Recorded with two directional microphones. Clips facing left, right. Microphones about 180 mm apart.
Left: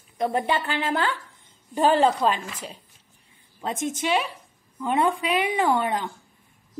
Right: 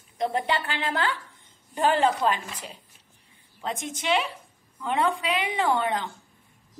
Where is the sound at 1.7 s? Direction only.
20° left (ahead or behind).